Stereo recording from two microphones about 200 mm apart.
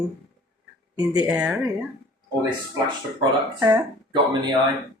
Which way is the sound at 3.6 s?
10° right (ahead or behind).